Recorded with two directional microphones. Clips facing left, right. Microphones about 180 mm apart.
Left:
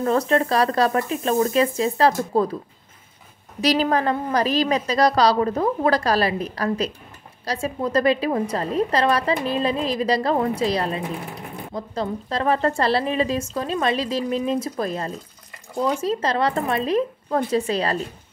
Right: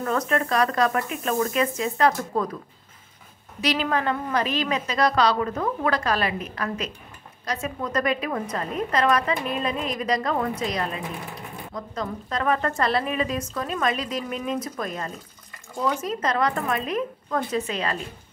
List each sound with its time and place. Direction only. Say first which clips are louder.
0.0 s a woman's voice: left 5 dB; 30° left (ahead or behind)
3.6 s a woman's voice: left 4 dB; 35° left (ahead or behind)